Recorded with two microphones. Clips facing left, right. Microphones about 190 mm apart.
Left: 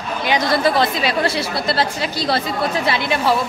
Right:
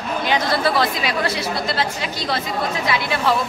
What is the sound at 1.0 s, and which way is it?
A woman's voice, 30° left (ahead or behind).